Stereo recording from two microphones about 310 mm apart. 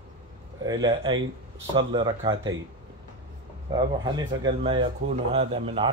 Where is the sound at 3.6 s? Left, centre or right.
Centre.